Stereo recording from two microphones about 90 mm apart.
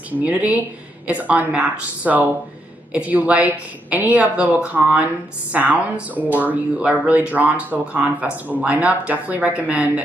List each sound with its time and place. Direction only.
0.1 s speech: 20° right (ahead or behind)